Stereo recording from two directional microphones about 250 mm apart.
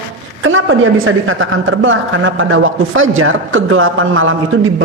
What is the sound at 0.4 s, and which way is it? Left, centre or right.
Speech, right.